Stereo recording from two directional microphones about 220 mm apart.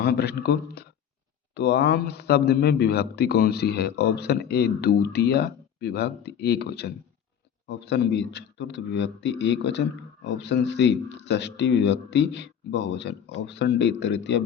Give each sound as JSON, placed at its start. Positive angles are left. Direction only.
{"t": 0.0, "sound": "speech", "side_deg": 45}